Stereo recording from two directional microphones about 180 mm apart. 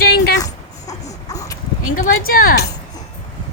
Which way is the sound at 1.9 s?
50° left (ahead or behind).